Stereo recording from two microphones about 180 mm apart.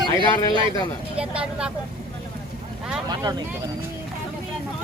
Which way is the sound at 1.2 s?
5° right (ahead or behind).